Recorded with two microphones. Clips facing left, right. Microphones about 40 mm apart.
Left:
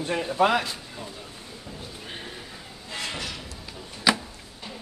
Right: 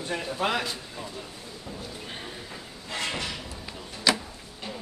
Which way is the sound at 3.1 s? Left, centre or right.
Centre.